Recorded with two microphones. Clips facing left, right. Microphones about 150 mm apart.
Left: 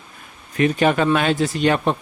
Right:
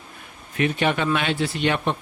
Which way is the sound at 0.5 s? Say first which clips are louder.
Left 5 dB; 40° left (ahead or behind).